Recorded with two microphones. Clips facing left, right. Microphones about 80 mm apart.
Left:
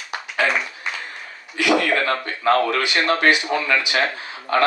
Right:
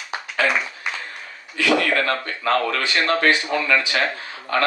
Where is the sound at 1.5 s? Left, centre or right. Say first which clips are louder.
Left 1 dB; centre.